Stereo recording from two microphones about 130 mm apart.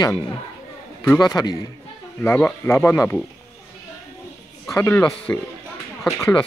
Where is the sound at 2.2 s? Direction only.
15° left (ahead or behind).